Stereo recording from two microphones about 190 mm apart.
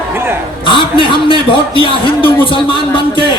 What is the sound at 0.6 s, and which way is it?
A man's voice, 25° left (ahead or behind).